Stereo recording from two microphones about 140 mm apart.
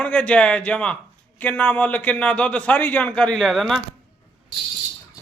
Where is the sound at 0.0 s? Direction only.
10° left (ahead or behind).